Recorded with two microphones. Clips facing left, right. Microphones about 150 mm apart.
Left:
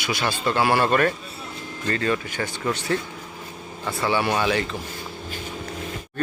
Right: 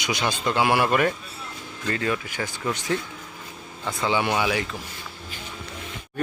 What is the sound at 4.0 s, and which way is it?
Speech, 15° right (ahead or behind).